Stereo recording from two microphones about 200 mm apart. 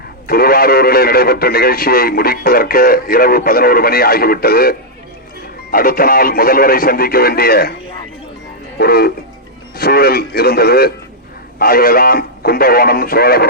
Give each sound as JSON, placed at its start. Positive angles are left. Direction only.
{"t": 0.3, "sound": "speech", "side_deg": 50}
{"t": 8.8, "sound": "speech", "side_deg": 50}